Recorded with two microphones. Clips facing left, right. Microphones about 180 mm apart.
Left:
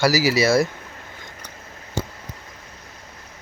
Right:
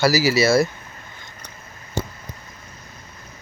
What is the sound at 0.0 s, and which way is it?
Speech, 15° left (ahead or behind).